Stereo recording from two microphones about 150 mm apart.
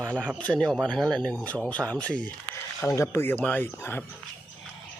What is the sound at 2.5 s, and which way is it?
Speech, 20° left (ahead or behind).